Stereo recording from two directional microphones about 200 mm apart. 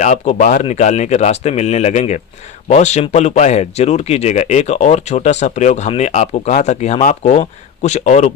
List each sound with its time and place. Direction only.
0.0 s speech: 40° left (ahead or behind)